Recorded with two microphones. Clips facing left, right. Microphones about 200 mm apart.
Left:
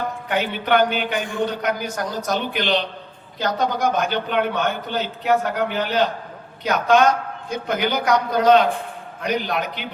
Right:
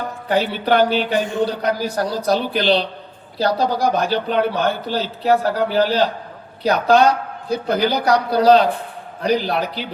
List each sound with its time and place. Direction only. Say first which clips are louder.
0.3 s a man's voice: right 4 dB; 35° right (ahead or behind)